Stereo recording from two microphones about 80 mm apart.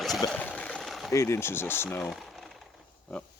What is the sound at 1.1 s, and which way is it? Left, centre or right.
Speech, left.